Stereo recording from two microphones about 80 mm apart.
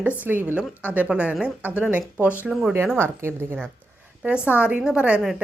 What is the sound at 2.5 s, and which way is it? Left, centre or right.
Speech, centre.